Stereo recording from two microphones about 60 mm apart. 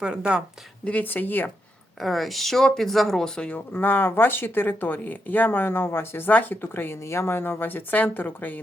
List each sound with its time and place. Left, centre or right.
0.0 s speech: centre
0.9 s speech: left
2.0 s speech: centre
3.8 s speech: left